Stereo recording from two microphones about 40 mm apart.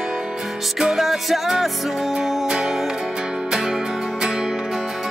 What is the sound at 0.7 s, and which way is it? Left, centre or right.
Music, centre.